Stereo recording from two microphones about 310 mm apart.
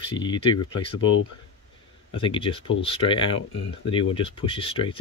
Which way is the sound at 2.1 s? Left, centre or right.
Centre.